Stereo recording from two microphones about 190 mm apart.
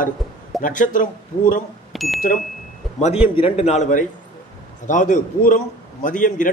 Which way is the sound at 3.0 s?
30° left (ahead or behind).